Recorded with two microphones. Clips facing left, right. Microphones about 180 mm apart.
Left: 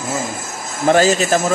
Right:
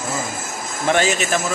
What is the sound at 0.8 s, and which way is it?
Speech, 35° left (ahead or behind).